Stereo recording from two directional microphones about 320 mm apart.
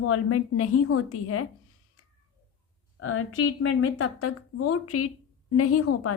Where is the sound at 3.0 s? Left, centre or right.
Left.